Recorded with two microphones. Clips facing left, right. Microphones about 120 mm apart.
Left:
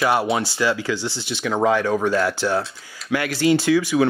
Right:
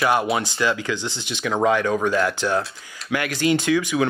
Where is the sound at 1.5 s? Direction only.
20° left (ahead or behind).